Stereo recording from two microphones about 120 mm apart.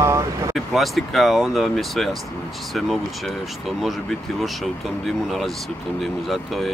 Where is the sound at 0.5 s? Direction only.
Centre (ahead or behind).